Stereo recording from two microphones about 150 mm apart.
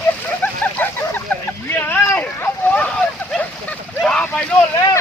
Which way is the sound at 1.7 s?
15° left (ahead or behind).